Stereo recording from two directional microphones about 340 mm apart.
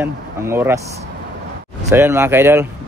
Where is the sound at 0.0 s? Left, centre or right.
Centre.